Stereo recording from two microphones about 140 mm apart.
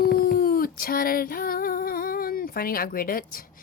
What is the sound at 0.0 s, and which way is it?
Dog, 90° left.